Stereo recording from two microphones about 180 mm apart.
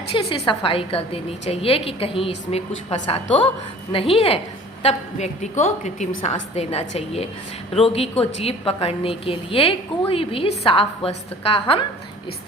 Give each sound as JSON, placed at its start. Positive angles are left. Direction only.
{"t": 0.1, "sound": "a woman's voice", "side_deg": 30}